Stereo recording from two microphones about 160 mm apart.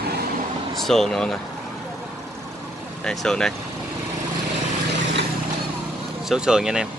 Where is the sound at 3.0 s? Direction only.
5° left (ahead or behind).